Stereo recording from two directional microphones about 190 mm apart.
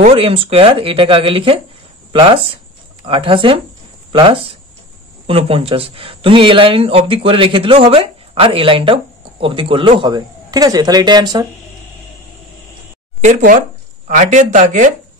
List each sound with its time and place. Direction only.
0.0 s speech: 30° right (ahead or behind)
13.2 s speech: 40° right (ahead or behind)